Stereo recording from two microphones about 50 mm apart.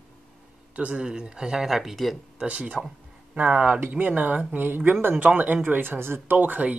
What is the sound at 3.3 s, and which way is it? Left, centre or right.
Speech, right.